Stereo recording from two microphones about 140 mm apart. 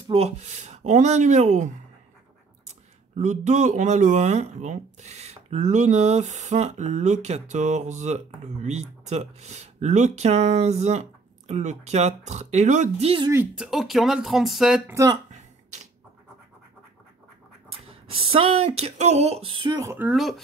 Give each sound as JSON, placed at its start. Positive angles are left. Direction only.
{"t": 0.1, "sound": "speech", "side_deg": -50}
{"t": 3.2, "sound": "speech", "side_deg": -60}
{"t": 13.6, "sound": "speech", "side_deg": 0}
{"t": 14.9, "sound": "speech", "side_deg": -20}
{"t": 17.7, "sound": "speech", "side_deg": -40}
{"t": 19.8, "sound": "speech", "side_deg": -20}
{"t": 20.1, "sound": "speech", "side_deg": 0}